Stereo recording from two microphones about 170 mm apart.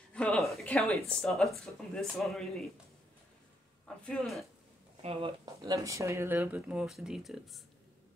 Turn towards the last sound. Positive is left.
turn(degrees=0)  # may be behind; listen again after turning